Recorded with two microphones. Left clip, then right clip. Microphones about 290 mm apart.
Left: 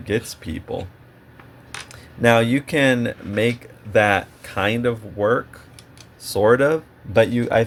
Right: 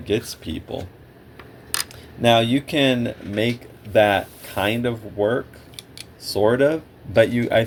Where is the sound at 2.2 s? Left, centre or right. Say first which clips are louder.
Left 1 dB; left.